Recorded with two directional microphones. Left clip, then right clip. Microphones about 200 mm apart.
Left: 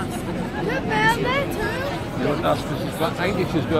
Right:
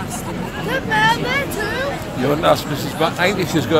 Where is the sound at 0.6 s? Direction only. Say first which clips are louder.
Right 4 dB; 60° right (ahead or behind).